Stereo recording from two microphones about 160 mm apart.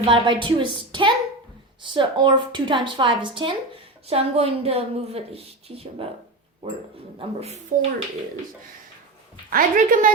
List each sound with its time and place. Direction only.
0.0 s a woman's voice: 30° right (ahead or behind)
9.5 s a woman's voice: 60° right (ahead or behind)